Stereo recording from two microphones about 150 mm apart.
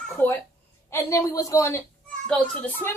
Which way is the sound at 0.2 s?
15° left (ahead or behind).